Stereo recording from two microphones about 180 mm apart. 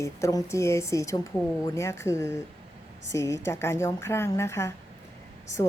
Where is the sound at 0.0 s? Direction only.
20° left (ahead or behind).